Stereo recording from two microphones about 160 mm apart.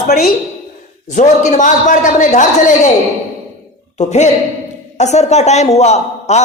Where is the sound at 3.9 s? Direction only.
45° left (ahead or behind).